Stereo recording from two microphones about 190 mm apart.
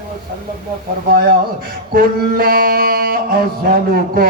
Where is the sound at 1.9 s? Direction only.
50° right (ahead or behind).